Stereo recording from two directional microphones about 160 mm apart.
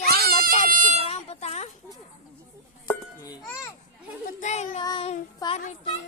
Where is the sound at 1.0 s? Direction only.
40° left (ahead or behind).